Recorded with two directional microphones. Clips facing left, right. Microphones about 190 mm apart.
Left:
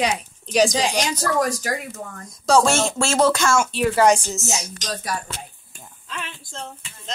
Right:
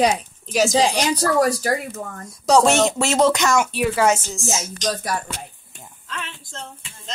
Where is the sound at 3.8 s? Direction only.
5° right (ahead or behind).